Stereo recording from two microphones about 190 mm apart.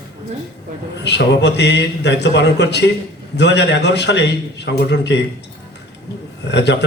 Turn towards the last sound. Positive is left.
turn(degrees=65)  # may be behind; listen again after turning